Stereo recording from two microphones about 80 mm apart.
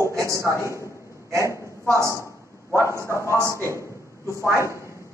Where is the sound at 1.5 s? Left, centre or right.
Right.